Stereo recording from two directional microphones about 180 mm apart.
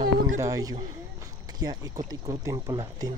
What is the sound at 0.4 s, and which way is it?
Speech, 20° right (ahead or behind).